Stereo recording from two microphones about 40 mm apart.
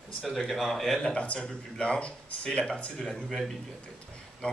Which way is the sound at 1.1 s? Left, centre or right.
Left.